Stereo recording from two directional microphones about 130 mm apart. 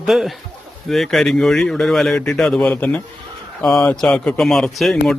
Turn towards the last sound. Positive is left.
turn(degrees=0)  # may be behind; listen again after turning